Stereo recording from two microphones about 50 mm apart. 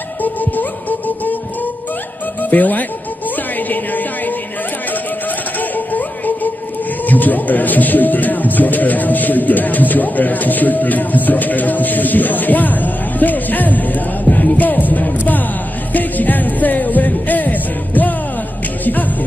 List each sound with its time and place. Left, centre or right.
0.2 s speech: left
3.3 s music: left
5.5 s music: left
7.0 s speech: left
15.9 s music: left